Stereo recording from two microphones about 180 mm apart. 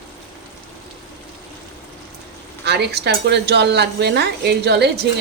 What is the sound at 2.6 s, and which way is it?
Speech, 65° right (ahead or behind).